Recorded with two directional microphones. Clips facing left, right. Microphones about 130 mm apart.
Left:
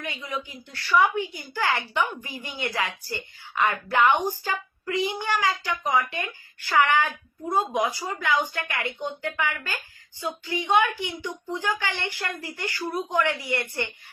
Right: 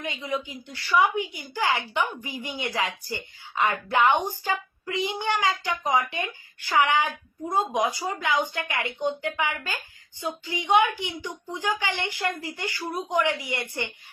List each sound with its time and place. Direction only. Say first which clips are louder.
0.0 s speech: right 3 dB; 20° right (ahead or behind)